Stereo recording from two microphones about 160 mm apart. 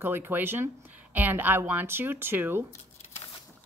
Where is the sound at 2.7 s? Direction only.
45° left (ahead or behind).